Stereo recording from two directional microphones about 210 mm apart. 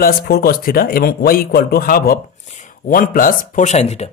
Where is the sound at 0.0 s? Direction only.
45° left (ahead or behind).